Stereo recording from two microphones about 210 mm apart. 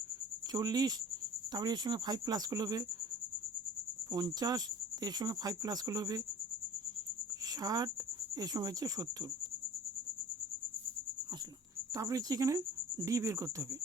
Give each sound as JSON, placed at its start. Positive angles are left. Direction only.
{"t": 0.5, "sound": "speech", "side_deg": -20}
{"t": 4.1, "sound": "speech", "side_deg": -20}
{"t": 7.5, "sound": "speech", "side_deg": -20}
{"t": 11.9, "sound": "speech", "side_deg": -15}